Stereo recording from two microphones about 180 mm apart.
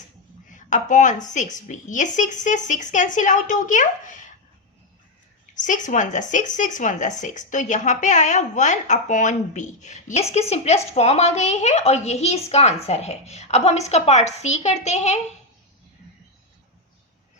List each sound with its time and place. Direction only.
0.5 s a woman's voice: 45° left (ahead or behind)
5.5 s speech: 45° left (ahead or behind)